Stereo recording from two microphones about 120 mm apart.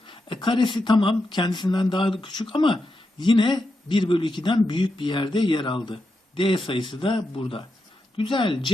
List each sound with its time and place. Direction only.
0.1 s a man's voice: 45° left (ahead or behind)